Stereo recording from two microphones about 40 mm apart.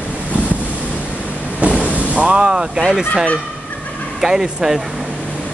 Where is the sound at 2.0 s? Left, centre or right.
Right.